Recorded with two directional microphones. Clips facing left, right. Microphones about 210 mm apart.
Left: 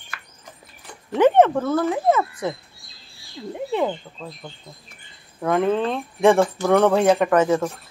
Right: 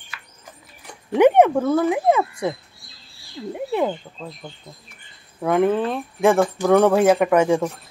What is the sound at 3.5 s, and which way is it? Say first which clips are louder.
Speech: right 1 dB; 10° right (ahead or behind).